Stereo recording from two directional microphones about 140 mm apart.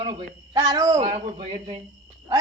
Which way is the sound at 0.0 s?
50° right (ahead or behind).